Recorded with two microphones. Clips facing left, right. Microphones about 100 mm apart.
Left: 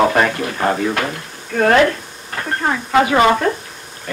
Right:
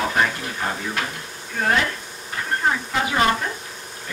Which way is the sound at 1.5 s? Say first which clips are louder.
Left 9 dB; 70° left (ahead or behind).